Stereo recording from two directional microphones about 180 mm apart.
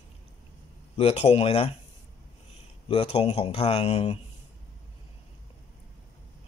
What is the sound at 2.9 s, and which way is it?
Speech, 35° left (ahead or behind).